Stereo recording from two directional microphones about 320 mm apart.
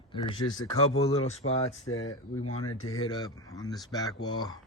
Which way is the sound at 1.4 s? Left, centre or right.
Left.